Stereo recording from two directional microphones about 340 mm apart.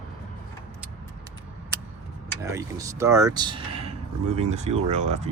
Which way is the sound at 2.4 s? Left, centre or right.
Centre.